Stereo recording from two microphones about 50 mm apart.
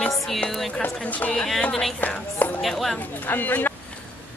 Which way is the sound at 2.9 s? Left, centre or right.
Left.